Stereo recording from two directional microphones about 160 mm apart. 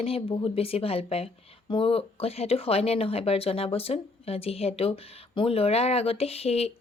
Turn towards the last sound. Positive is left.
turn(degrees=40)  # may be behind; listen again after turning